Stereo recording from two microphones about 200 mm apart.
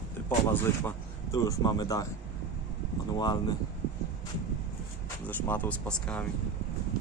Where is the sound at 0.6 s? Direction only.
15° left (ahead or behind).